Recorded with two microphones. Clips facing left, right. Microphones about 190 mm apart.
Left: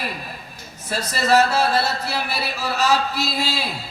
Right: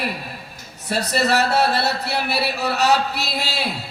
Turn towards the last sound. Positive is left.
turn(degrees=-65)  # may be behind; listen again after turning